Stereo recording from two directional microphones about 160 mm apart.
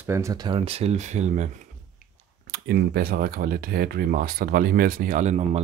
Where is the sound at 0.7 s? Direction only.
40° right (ahead or behind).